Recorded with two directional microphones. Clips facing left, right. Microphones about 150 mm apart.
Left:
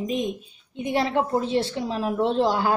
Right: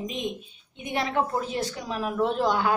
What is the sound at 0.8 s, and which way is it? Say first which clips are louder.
A woman's voice: left 4 dB; 30° left (ahead or behind).